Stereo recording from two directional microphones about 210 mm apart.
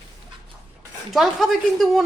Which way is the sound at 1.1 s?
Centre (ahead or behind).